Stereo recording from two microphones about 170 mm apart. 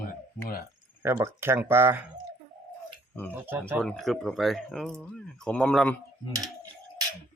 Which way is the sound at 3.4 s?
10° right (ahead or behind).